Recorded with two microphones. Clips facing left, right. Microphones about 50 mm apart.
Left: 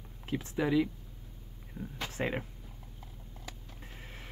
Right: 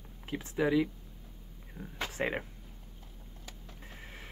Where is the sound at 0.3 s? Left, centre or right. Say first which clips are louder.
Right 1 dB; centre.